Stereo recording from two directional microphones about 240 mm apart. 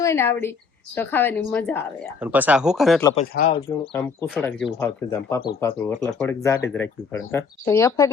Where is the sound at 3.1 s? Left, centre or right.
Left.